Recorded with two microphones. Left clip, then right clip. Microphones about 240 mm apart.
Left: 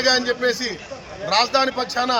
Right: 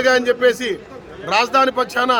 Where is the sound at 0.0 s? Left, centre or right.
Right.